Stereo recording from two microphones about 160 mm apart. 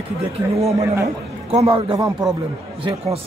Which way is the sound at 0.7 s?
20° right (ahead or behind).